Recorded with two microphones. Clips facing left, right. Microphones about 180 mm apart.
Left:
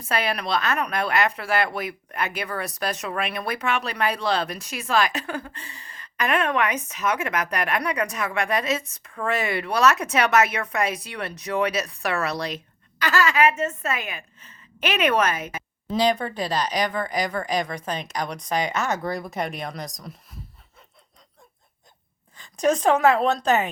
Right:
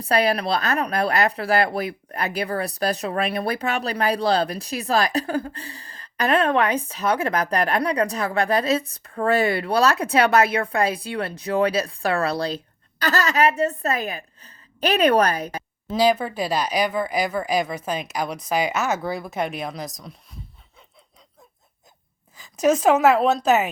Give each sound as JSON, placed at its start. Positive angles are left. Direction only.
{"t": 0.0, "sound": "speech", "side_deg": -35}
{"t": 15.9, "sound": "speech", "side_deg": -5}
{"t": 22.4, "sound": "speech", "side_deg": -5}